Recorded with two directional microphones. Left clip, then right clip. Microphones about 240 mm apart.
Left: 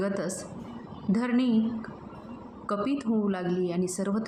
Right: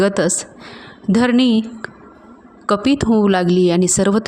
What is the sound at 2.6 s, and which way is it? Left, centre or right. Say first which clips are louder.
A woman's voice: right 13 dB; right.